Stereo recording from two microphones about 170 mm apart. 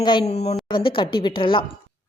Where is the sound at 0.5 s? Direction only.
30° left (ahead or behind).